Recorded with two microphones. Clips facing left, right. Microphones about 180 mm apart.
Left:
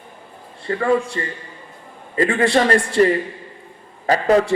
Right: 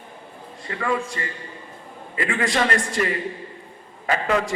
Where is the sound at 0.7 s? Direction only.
35° left (ahead or behind).